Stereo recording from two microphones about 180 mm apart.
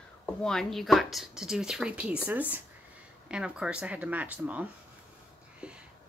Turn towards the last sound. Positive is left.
turn(degrees=-5)  # may be behind; listen again after turning